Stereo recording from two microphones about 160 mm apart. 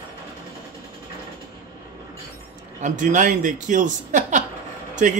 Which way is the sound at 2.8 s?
50° right (ahead or behind).